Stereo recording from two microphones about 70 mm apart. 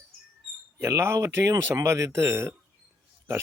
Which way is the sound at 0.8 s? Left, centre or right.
Right.